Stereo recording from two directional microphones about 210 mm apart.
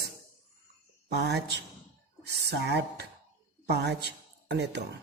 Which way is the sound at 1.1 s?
50° right (ahead or behind).